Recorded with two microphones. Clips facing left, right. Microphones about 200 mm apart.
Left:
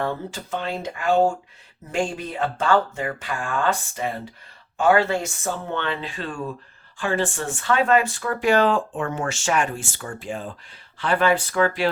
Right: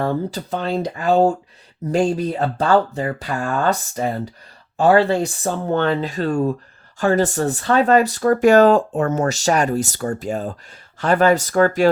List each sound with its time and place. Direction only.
0.0 s speech: 35° right (ahead or behind)